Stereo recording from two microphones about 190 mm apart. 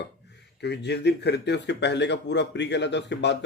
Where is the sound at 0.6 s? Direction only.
65° left (ahead or behind).